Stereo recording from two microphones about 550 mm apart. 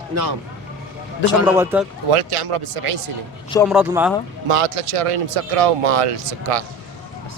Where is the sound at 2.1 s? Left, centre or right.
Right.